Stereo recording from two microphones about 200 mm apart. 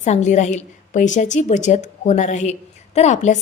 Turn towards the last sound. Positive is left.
turn(degrees=35)  # may be behind; listen again after turning